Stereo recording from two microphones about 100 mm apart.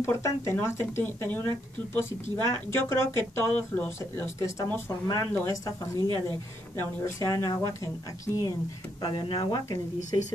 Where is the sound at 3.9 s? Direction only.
25° left (ahead or behind).